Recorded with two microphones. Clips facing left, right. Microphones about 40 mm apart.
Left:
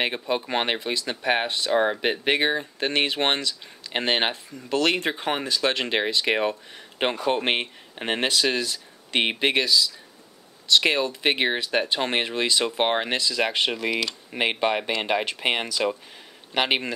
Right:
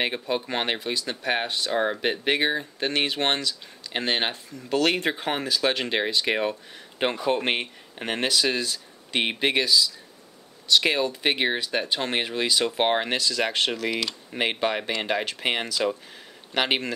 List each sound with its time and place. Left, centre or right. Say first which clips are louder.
0.0 s speech: left 1 dB; centre
4.6 s speech: even; centre
7.9 s speech: left 1 dB; left
9.1 s speech: left 1 dB; centre